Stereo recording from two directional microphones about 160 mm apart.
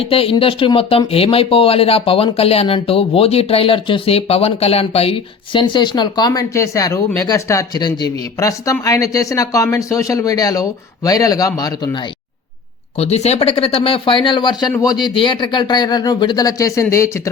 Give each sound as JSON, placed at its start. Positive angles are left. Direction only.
{"t": 0.1, "sound": "speech", "side_deg": 35}
{"t": 13.0, "sound": "speech", "side_deg": 40}